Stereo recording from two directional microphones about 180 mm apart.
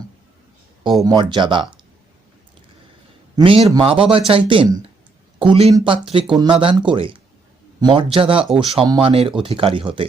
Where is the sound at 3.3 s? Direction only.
30° right (ahead or behind).